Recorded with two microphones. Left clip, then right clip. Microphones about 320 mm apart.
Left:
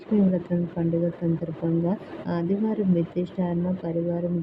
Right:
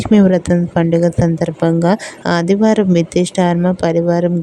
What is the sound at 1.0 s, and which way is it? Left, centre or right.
Speech, right.